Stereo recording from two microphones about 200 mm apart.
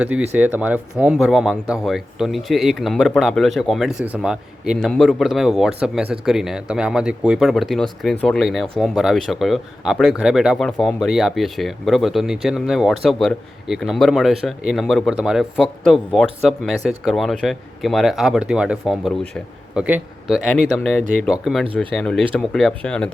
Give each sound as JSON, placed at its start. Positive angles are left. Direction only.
{"t": 0.0, "sound": "speech", "side_deg": -10}